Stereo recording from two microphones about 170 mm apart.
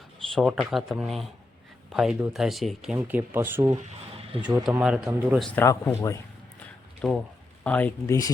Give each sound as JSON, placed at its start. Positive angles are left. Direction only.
{"t": 0.3, "sound": "speech", "side_deg": 0}
{"t": 3.7, "sound": "a sound", "side_deg": -35}
{"t": 4.4, "sound": "speech", "side_deg": -5}
{"t": 5.4, "sound": "speech", "side_deg": 10}
{"t": 7.0, "sound": "speech", "side_deg": 5}